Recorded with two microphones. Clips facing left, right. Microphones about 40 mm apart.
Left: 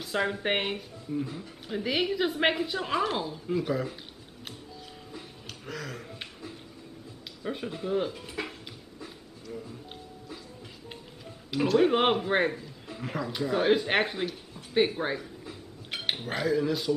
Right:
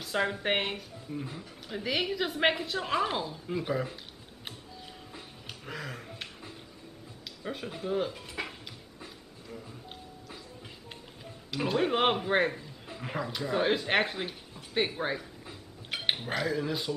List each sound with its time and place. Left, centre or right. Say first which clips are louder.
0.0 s a woman's voice: left 1 dB; centre
5.7 s speech: left 2 dB; centre
7.4 s a woman's voice: left 2 dB; centre
11.8 s a woman's voice: even; centre
12.8 s a sound: left 1 dB; centre
13.3 s a woman's voice: left 4 dB; centre
15.4 s a sound: left 3 dB; centre
16.2 s a woman's voice: left 3 dB; centre